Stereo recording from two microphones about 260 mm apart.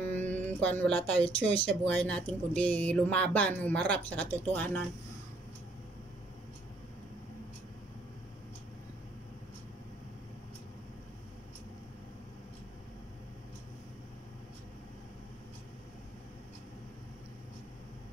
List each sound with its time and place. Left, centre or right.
0.0 s mantra: centre
1.2 s speech: left
1.9 s speech: centre